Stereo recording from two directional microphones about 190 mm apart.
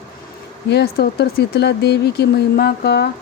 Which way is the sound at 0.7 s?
60° left (ahead or behind).